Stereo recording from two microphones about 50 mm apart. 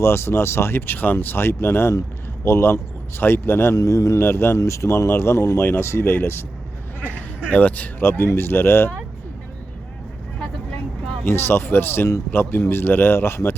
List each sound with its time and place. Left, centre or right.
0.0 s speech: left
3.8 s a man's voice: left
4.2 s a man's voice: left
4.5 s a man's voice: left
7.0 s speech: left
7.9 s a man's voice: left
11.3 s a man's voice: left